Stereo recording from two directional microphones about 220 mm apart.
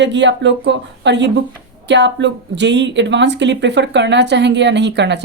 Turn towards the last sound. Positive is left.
turn(degrees=-50)  # may be behind; listen again after turning